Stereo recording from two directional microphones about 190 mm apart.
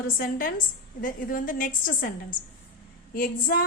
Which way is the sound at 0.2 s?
45° left (ahead or behind).